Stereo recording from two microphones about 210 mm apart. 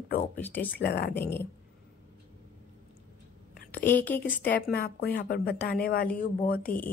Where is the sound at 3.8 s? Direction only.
10° left (ahead or behind).